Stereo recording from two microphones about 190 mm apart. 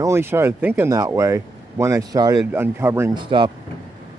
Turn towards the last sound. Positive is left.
turn(degrees=-25)  # may be behind; listen again after turning